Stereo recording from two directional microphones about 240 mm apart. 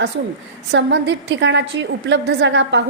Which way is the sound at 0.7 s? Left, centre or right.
Right.